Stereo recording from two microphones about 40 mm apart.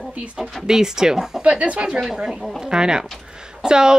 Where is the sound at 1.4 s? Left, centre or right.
Right.